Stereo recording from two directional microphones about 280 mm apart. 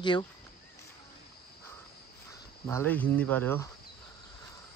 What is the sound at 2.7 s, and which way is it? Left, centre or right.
Speech, centre.